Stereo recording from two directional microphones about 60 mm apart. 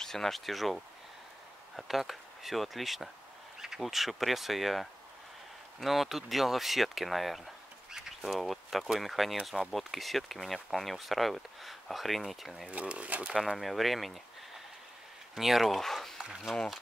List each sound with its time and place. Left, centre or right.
0.0 s speech: centre
12.6 s speech: right
13.3 s speech: centre
15.3 s speech: centre